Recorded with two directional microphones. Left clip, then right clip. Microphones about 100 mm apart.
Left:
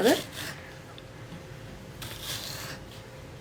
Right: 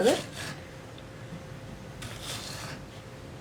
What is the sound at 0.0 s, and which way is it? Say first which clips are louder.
Speech: left 1 dB; 5° left (ahead or behind).